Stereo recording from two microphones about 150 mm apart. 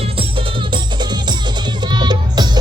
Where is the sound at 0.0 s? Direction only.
35° right (ahead or behind).